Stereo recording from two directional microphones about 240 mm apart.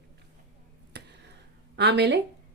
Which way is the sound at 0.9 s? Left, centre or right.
Right.